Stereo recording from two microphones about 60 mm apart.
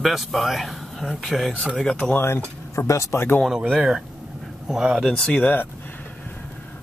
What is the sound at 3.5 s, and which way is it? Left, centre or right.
Speech, centre.